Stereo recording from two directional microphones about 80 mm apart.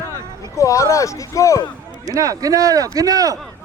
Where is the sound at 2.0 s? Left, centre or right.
Right.